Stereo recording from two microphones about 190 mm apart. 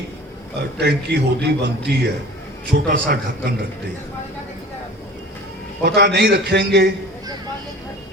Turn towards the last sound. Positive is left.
turn(degrees=-60)  # may be behind; listen again after turning